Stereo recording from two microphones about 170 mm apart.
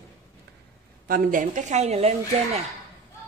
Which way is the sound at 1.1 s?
55° right (ahead or behind).